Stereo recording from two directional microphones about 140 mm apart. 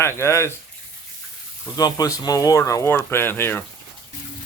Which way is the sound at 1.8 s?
25° left (ahead or behind).